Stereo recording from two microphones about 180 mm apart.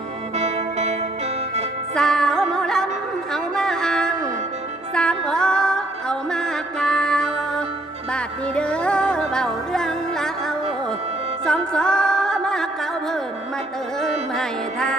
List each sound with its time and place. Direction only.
0.3 s music: 35° right (ahead or behind)
2.0 s music: 5° left (ahead or behind)
3.3 s a sound: 5° left (ahead or behind)
4.9 s music: 5° left (ahead or behind)
11.4 s music: 5° left (ahead or behind)
14.0 s music: 5° left (ahead or behind)